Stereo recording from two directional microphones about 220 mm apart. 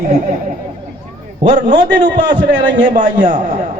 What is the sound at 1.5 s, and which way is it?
Speech, 35° right (ahead or behind).